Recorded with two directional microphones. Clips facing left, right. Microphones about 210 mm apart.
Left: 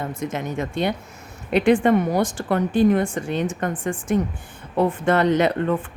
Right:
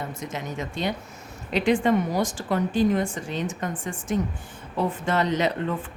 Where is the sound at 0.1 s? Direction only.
55° left (ahead or behind).